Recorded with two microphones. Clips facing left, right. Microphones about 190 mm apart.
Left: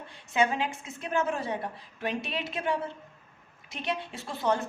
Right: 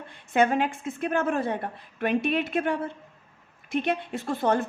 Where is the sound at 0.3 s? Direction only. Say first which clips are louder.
Right 5 dB; 55° right (ahead or behind).